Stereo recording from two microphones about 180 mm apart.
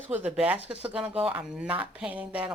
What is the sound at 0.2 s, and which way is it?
Speech, 5° right (ahead or behind).